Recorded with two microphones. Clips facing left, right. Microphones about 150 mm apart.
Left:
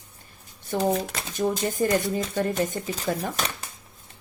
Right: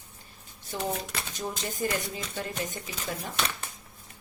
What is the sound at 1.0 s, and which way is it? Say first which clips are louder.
Speech: left 9 dB; 55° left (ahead or behind).